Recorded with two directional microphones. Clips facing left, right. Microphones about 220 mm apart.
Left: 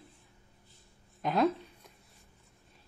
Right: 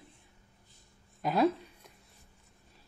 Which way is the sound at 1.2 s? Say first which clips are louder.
Right 1 dB; centre (ahead or behind).